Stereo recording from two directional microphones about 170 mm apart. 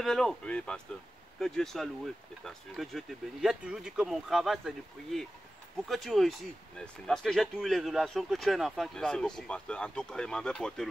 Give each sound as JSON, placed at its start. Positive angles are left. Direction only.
{"t": 0.0, "sound": "speech", "side_deg": 0}